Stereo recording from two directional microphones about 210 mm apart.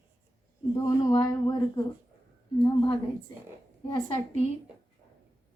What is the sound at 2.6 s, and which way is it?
Speech, 20° left (ahead or behind).